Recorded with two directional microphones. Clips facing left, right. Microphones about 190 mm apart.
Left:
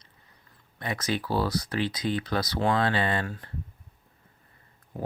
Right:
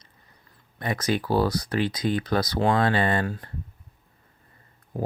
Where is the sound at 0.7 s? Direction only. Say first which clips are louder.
Right 4 dB; 45° right (ahead or behind).